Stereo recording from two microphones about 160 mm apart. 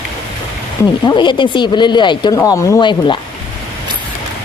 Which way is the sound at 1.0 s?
30° left (ahead or behind).